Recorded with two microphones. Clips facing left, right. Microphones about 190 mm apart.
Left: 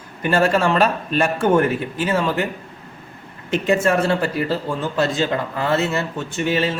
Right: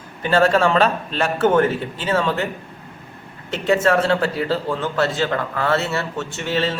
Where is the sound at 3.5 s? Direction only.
15° left (ahead or behind).